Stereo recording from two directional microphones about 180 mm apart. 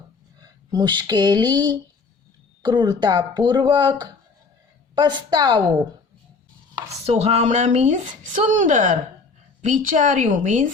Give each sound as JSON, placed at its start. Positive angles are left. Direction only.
{"t": 0.7, "sound": "speech", "side_deg": -25}
{"t": 7.0, "sound": "a woman's voice", "side_deg": -35}